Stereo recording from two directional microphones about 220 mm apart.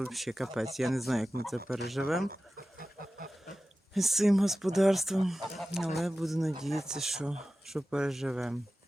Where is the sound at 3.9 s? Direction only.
Centre (ahead or behind).